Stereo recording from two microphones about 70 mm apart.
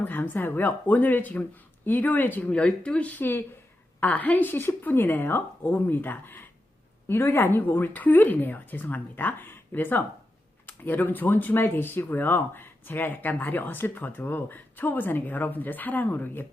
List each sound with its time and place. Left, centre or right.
0.0 s speech: left
2.5 s speech: centre